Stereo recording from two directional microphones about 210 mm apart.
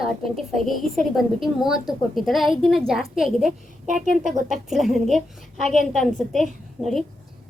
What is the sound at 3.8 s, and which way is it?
Speech, 35° right (ahead or behind).